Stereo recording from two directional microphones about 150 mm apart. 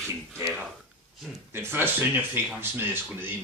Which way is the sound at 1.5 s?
15° right (ahead or behind).